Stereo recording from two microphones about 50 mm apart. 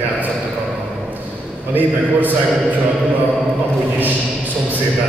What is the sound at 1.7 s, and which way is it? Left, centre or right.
Speech, right.